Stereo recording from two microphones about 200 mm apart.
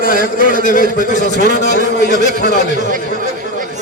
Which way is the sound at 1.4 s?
60° left (ahead or behind).